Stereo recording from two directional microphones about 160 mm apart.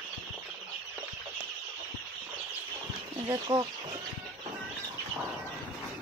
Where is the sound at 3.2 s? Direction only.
20° right (ahead or behind).